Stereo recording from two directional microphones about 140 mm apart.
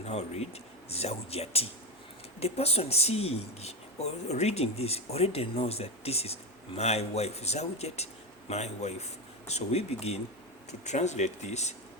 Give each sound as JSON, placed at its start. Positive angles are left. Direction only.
{"t": 0.0, "sound": "speech", "side_deg": 50}